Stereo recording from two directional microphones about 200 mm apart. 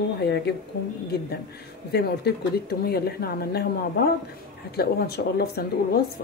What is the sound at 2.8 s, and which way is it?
Speech, 50° left (ahead or behind).